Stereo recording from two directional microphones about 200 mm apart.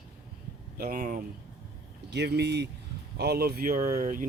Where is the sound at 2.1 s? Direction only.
55° right (ahead or behind).